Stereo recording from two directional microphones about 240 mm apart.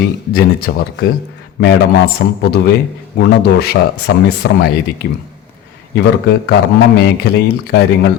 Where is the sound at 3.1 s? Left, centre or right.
Left.